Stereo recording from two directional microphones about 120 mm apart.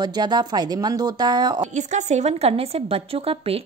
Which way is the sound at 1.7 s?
80° right.